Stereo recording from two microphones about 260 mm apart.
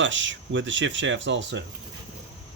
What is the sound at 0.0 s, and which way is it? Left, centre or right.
Speech, right.